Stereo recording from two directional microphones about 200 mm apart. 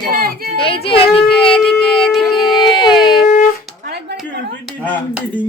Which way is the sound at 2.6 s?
20° left (ahead or behind).